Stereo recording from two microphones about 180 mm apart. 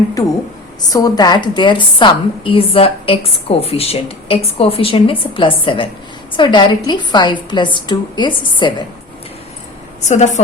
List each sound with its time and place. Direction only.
0.8 s a woman's voice: 20° left (ahead or behind)
10.1 s a woman's voice: 40° left (ahead or behind)